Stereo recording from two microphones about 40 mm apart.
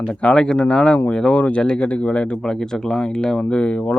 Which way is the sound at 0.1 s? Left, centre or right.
Left.